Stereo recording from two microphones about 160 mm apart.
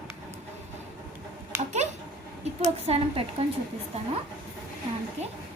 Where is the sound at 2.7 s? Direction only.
40° right (ahead or behind).